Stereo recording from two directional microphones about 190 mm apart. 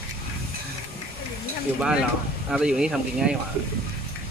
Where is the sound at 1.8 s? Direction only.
5° right (ahead or behind).